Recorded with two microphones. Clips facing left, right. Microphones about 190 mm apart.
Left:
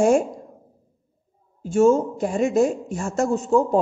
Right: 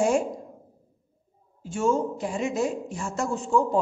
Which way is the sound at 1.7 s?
45° left (ahead or behind).